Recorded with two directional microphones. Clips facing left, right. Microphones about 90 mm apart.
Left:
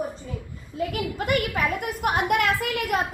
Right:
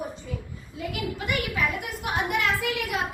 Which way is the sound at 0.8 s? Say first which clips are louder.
Left 4 dB; 45° left (ahead or behind).